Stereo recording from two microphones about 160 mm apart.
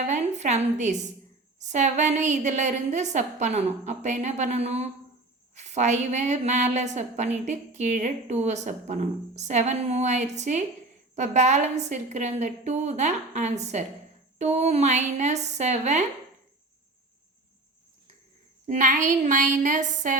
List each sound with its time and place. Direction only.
0.0 s a sound: 45° right (ahead or behind)
1.5 s a woman's voice: 50° right (ahead or behind)
18.7 s a woman's voice: 50° right (ahead or behind)